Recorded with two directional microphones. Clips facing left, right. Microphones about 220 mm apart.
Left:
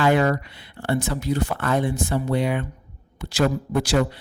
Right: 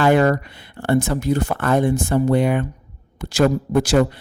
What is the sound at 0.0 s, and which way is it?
Speech, 50° right (ahead or behind).